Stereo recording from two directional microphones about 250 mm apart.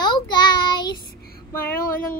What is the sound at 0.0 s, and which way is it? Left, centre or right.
Child singing, centre.